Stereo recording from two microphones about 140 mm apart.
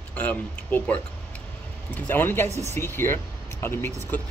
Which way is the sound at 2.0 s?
15° left (ahead or behind).